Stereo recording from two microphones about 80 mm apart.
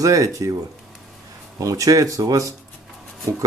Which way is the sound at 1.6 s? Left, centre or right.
Right.